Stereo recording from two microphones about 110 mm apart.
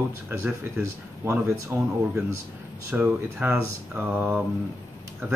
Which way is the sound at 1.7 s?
20° right (ahead or behind).